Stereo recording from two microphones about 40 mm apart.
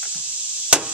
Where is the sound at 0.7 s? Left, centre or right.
Right.